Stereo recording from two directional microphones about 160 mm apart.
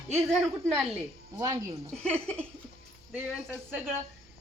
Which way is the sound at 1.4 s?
20° right (ahead or behind).